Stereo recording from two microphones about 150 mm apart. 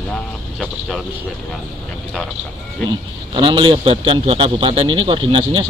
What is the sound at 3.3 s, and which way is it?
A man's voice, 30° right (ahead or behind).